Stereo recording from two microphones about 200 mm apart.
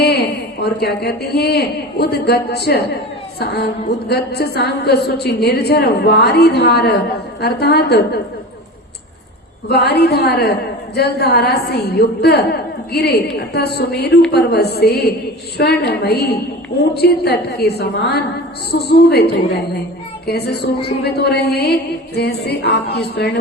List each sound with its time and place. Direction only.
0.0 s a woman's voice: 55° left (ahead or behind)
9.6 s a woman's voice: 55° left (ahead or behind)